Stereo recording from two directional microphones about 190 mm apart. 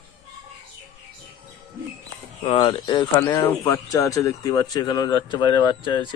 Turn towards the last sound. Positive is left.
turn(degrees=25)  # may be behind; listen again after turning